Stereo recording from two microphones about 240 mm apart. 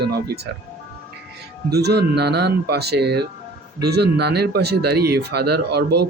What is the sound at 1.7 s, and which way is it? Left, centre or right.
Speech, right.